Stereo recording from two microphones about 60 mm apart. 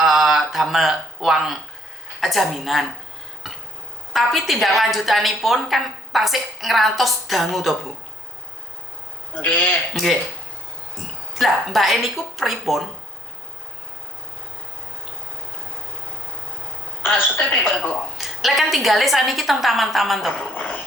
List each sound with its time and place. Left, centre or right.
0.0 s a sound: centre
2.2 s a woman's voice: centre
4.1 s a woman's voice: centre
9.3 s a man's voice: left
9.9 s a woman's voice: centre
17.6 s a woman's voice: centre
20.5 s speech: left